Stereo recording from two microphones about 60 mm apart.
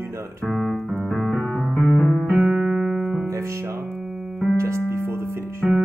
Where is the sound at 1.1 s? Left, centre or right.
Centre.